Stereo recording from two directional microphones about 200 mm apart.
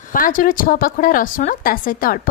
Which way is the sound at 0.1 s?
40° left (ahead or behind).